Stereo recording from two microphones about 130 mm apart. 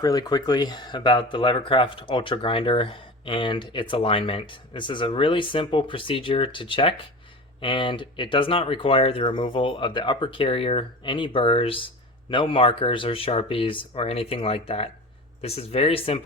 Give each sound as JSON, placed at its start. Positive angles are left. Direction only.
{"t": 0.0, "sound": "speech", "side_deg": 30}